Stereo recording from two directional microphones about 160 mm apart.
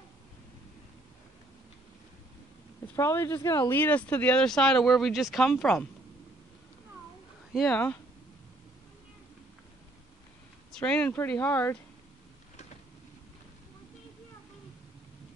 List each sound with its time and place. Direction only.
3.0 s speech: 15° left (ahead or behind)
7.5 s speech: centre (ahead or behind)
10.7 s speech: 5° left (ahead or behind)